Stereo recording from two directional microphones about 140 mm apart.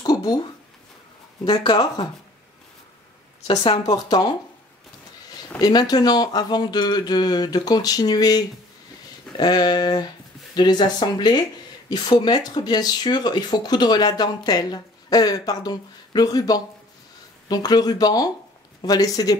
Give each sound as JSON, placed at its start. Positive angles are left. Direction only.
{"t": 0.0, "sound": "a sound", "side_deg": 30}
{"t": 1.4, "sound": "speech", "side_deg": 30}
{"t": 3.4, "sound": "speech", "side_deg": 40}
{"t": 3.8, "sound": "speech", "side_deg": 25}
{"t": 5.6, "sound": "speech", "side_deg": 30}